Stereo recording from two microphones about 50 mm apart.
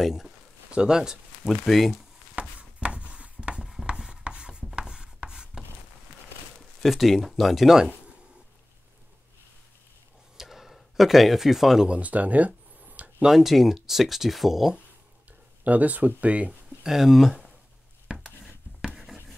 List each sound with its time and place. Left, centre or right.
0.0 s speech: centre
0.7 s speech: centre
1.5 s speech: centre
2.3 s a sound: right
3.8 s chopping: centre
6.8 s speech: centre
10.3 s a sound: centre
11.9 s a sound: right
13.2 s speech: centre
15.6 s speech: right
16.8 s speech: centre